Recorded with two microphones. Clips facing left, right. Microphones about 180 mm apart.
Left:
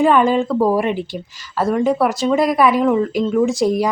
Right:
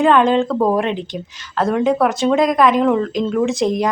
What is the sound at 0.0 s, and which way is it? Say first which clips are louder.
Speech: right 1 dB; 5° left (ahead or behind).